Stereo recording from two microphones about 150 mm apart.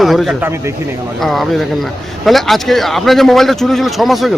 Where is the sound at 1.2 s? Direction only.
Centre (ahead or behind).